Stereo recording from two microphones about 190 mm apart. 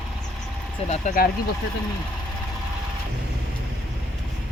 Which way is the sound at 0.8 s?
35° left (ahead or behind).